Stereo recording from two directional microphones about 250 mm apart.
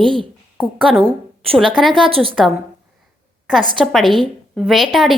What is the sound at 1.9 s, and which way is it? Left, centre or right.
Speech, right.